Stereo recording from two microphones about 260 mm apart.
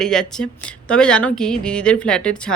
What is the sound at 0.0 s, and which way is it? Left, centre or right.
A woman's voice, centre.